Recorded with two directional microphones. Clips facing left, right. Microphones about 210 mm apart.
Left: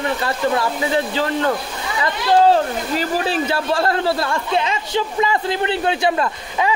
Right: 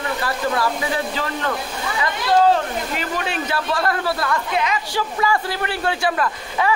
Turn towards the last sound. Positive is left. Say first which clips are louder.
# left 1 dB
turn(degrees=25)  # may be behind; listen again after turning